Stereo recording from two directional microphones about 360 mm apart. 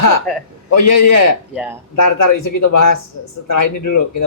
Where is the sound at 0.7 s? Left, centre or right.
Left.